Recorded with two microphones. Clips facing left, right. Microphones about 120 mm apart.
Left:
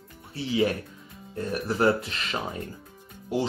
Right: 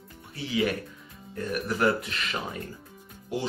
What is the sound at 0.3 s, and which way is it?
Speech, 30° left (ahead or behind).